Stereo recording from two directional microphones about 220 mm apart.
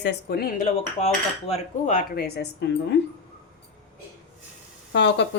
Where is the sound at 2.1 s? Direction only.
45° left (ahead or behind).